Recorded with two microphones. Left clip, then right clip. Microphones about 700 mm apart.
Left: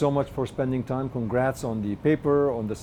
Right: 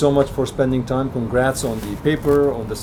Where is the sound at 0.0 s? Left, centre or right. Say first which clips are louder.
Right 8 dB; left.